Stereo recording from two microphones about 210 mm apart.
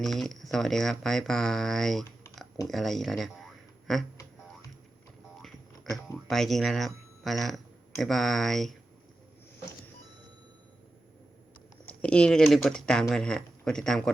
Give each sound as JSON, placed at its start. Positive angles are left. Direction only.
{"t": 0.0, "sound": "speech", "side_deg": 0}
{"t": 5.4, "sound": "a sound", "side_deg": 0}
{"t": 6.2, "sound": "speech", "side_deg": 0}
{"t": 12.0, "sound": "speech", "side_deg": 5}